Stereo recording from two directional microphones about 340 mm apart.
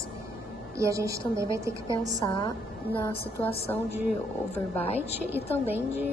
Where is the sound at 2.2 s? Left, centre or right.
Centre.